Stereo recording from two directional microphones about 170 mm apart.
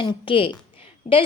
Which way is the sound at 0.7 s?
30° left (ahead or behind).